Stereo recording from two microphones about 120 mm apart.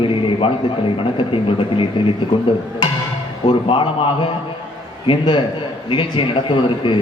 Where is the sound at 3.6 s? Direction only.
45° left (ahead or behind).